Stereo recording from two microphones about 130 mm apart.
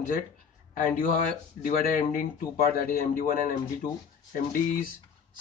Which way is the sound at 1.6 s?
90° left.